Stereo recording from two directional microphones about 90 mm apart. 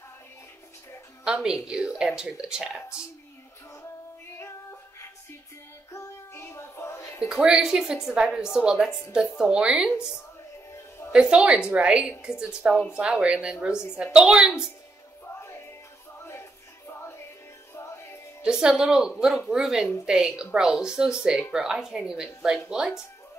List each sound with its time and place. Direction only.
1.2 s speech: 10° right (ahead or behind)
4.4 s music: 30° left (ahead or behind)
5.9 s child singing: 30° left (ahead or behind)
7.2 s a woman's voice: 5° right (ahead or behind)
11.1 s speech: 10° right (ahead or behind)
15.4 s music: 30° left (ahead or behind)
18.4 s a woman's voice: 10° right (ahead or behind)